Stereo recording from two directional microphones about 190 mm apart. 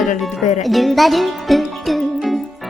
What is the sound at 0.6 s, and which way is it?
Music, centre (ahead or behind).